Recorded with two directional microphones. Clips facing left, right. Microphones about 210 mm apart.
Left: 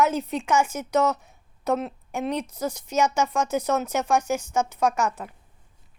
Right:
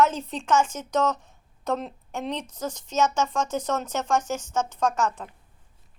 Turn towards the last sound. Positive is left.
turn(degrees=10)  # may be behind; listen again after turning